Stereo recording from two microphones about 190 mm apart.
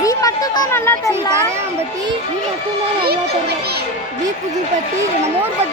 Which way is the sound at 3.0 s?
55° right (ahead or behind).